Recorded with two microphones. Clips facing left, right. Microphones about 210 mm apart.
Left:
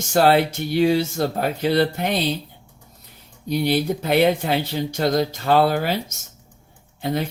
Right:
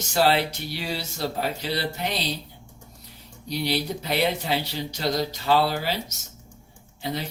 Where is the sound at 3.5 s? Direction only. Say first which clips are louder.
Left 6 dB; 50° left (ahead or behind).